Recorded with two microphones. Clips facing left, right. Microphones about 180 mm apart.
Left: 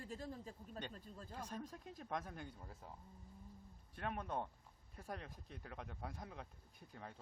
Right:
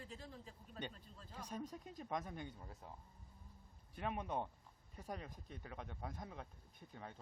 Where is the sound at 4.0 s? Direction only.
5° right (ahead or behind).